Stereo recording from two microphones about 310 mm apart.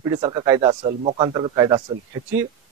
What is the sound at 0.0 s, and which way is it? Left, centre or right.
Speech, centre.